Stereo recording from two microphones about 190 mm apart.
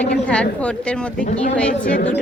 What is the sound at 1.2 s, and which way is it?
Speech, 40° left (ahead or behind).